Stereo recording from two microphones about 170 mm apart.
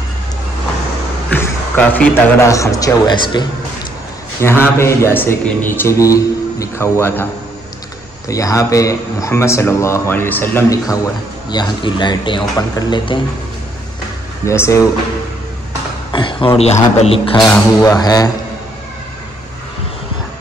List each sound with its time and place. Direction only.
1.3 s a man's voice: 10° left (ahead or behind); by 3.4 s 25° left (ahead or behind)
4.4 s speech: 15° left (ahead or behind)
8.3 s a man's voice: 20° left (ahead or behind)
14.4 s speech: 15° left (ahead or behind)
16.1 s a sound: 30° left (ahead or behind)
17.0 s speech: 35° left (ahead or behind)
17.4 s a man's voice: 15° left (ahead or behind)